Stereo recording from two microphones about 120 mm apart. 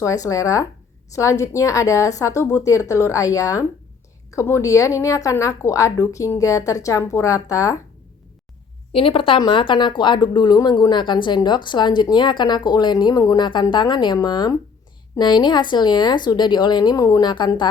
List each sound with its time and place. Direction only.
0.0 s a woman's voice: 30° left (ahead or behind)
8.9 s speech: 50° left (ahead or behind)